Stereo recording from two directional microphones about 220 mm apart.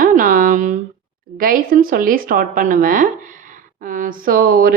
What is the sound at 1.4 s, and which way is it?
A woman's voice, 40° right (ahead or behind).